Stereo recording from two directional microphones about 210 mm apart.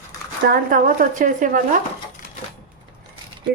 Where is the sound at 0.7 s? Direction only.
40° right (ahead or behind).